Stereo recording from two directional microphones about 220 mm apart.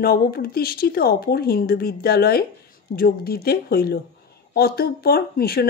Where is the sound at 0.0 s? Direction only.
45° left (ahead or behind).